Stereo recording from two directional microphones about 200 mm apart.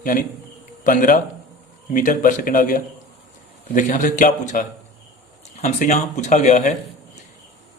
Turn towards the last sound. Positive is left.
turn(degrees=40)  # may be behind; listen again after turning